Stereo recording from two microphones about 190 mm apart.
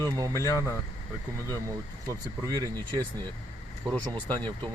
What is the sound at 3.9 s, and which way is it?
Speech, 10° left (ahead or behind).